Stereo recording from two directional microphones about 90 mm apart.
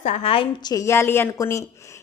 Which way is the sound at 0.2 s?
80° left.